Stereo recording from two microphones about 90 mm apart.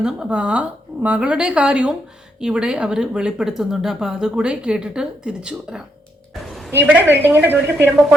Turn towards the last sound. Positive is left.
turn(degrees=-20)  # may be behind; listen again after turning